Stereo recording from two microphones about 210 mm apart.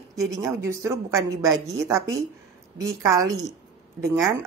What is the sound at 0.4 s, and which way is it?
Speech, 15° right (ahead or behind).